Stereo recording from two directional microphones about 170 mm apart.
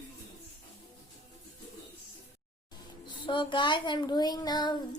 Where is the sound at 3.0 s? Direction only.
30° left (ahead or behind).